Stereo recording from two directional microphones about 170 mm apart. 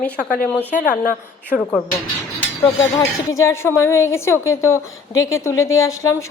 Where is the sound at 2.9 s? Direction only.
20° left (ahead or behind).